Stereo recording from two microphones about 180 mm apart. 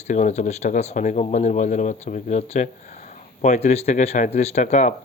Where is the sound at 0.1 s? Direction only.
40° left (ahead or behind).